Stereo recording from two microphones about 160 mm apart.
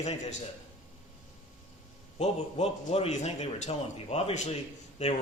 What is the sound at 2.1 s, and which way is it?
Speech, 40° left (ahead or behind).